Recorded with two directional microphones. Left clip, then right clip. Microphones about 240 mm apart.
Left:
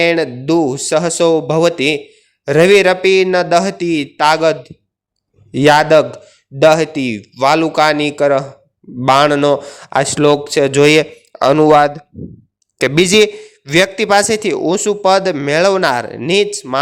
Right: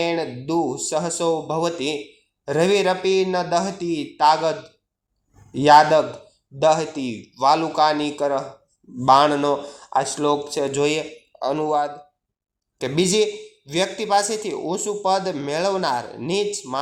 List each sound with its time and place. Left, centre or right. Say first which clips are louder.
0.0 s a man's voice: left 10 dB; left